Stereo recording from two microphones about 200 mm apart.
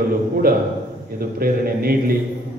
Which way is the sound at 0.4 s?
45° right (ahead or behind).